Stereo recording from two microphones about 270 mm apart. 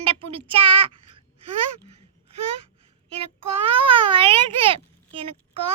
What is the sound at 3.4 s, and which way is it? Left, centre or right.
A child's voice, right.